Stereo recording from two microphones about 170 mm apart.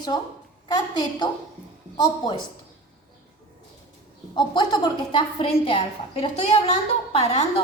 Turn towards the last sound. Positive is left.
turn(degrees=40)  # may be behind; listen again after turning